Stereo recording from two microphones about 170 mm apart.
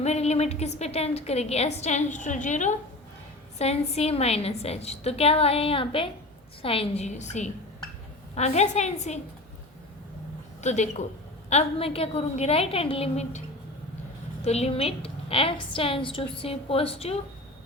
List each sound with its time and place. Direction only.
0.0 s a woman's voice: 40° left (ahead or behind)
10.6 s a woman's voice: 45° left (ahead or behind)
14.4 s a woman's voice: 40° left (ahead or behind)